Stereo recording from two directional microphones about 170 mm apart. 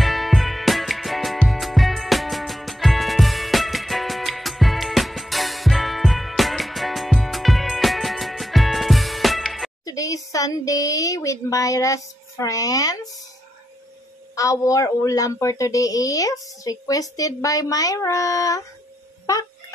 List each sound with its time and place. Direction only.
0.0 s music: centre (ahead or behind)
9.8 s a sound: 20° left (ahead or behind)
14.3 s speech: 20° left (ahead or behind)